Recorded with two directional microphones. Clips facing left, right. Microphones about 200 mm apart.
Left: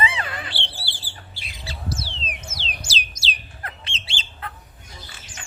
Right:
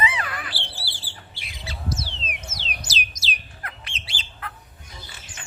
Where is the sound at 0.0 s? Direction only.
25° left (ahead or behind).